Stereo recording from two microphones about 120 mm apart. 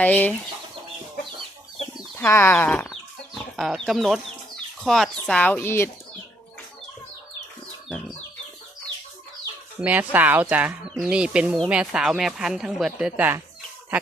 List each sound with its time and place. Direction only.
0.0 s speech: 15° left (ahead or behind)
2.1 s speech: 20° left (ahead or behind)
2.9 s chicken: centre (ahead or behind)
4.8 s speech: centre (ahead or behind); by 5.9 s 20° left (ahead or behind)
7.9 s chicken: 5° left (ahead or behind)
9.8 s speech: 15° right (ahead or behind)